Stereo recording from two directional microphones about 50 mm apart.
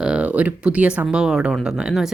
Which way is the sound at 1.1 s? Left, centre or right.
Centre.